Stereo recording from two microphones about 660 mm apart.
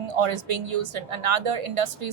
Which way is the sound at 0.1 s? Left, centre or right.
Right.